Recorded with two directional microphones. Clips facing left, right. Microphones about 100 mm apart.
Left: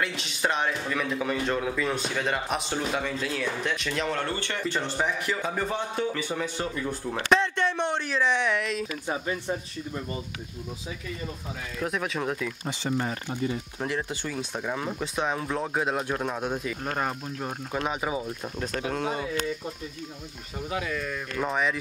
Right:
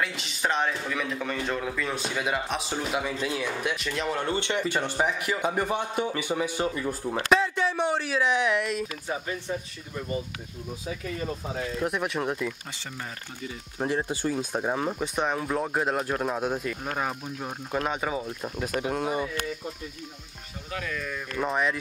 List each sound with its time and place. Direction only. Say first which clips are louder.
0.0 s a man's voice: left 1 dB; centre (ahead or behind)
4.2 s a man's voice: right 3 dB; 20° right (ahead or behind)
11.8 s a man's voice: left 1 dB; 5° right (ahead or behind)
13.7 s speech: right 3 dB; 20° right (ahead or behind)
14.9 s a man's voice: right 1 dB; 5° right (ahead or behind)
20.9 s a man's voice: left 1 dB; centre (ahead or behind)